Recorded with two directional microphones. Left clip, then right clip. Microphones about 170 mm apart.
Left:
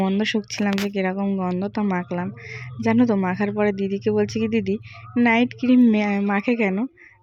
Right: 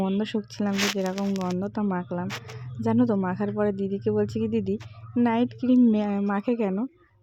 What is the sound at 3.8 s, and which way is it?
A woman's voice, 5° left (ahead or behind).